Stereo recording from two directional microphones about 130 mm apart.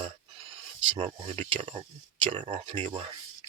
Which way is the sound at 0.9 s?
45° right (ahead or behind).